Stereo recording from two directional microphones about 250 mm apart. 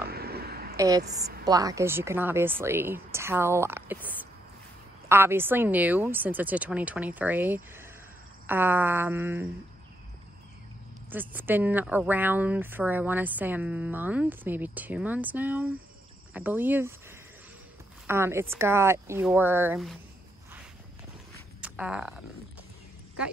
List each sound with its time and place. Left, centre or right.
0.1 s a sound: right
0.7 s a woman's voice: centre
5.0 s speech: centre
11.1 s speech: centre
18.0 s speech: centre
21.5 s a sound: centre